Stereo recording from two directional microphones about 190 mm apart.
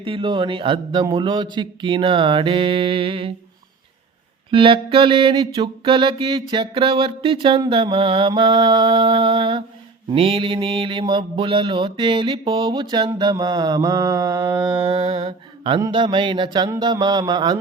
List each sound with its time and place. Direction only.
0.0 s mantra: 25° right (ahead or behind)
4.5 s mantra: 25° right (ahead or behind)
14.8 s mantra: 25° right (ahead or behind)